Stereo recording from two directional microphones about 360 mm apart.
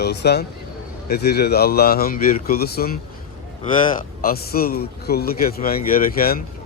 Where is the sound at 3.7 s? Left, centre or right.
Centre.